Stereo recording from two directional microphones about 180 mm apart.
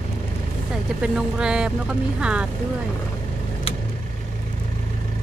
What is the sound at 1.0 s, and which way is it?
Speech, 5° right (ahead or behind).